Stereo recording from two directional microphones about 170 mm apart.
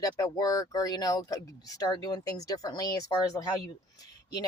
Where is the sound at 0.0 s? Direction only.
20° left (ahead or behind).